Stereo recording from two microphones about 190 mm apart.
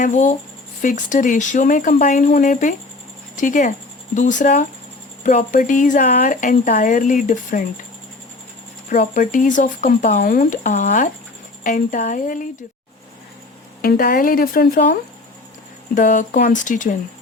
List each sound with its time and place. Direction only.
0.0 s a woman's voice: 40° left (ahead or behind)
8.9 s a woman's voice: 45° left (ahead or behind)
13.8 s a woman's voice: 50° left (ahead or behind)
16.0 s speech: 40° left (ahead or behind)